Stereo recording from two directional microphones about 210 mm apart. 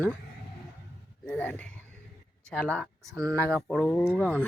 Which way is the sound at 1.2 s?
5° left (ahead or behind).